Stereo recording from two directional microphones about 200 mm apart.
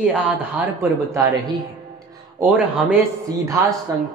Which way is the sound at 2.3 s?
10° right (ahead or behind).